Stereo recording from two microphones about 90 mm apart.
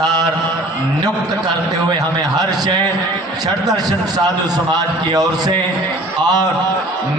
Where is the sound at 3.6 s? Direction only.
45° right (ahead or behind).